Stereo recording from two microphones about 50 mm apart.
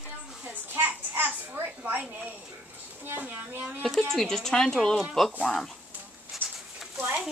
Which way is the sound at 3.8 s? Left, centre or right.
Centre.